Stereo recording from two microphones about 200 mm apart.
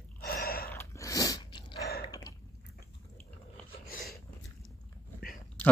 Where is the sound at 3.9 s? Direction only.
45° left (ahead or behind).